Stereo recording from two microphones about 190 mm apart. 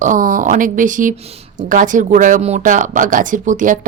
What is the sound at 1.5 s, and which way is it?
Speech, 45° right (ahead or behind).